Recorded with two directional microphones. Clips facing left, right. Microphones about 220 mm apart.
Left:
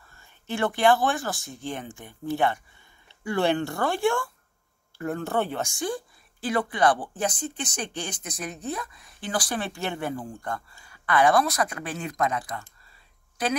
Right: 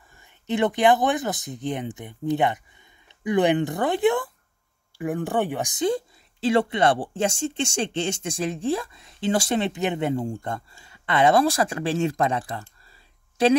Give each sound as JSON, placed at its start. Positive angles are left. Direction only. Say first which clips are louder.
{"t": 0.1, "sound": "speech", "louder": "right 6 dB", "side_deg": -20}